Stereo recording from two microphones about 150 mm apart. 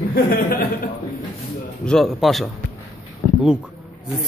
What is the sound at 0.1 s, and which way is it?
Speech, 80° left.